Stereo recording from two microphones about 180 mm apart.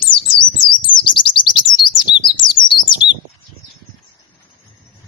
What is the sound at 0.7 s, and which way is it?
Bird, 25° left (ahead or behind).